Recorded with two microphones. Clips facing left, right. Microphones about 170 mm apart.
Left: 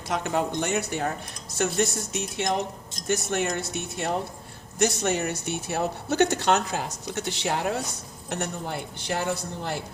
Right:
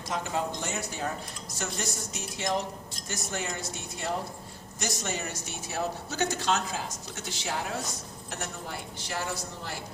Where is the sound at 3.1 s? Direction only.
70° left (ahead or behind).